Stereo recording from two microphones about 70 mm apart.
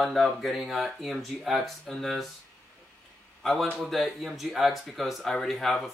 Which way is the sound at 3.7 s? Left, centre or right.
Centre.